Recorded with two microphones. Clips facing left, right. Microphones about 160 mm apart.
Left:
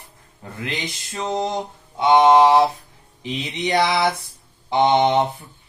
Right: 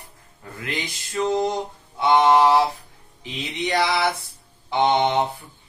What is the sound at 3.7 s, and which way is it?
Speech, 20° left (ahead or behind).